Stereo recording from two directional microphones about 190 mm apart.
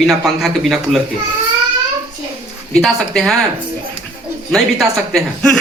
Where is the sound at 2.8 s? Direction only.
Centre (ahead or behind).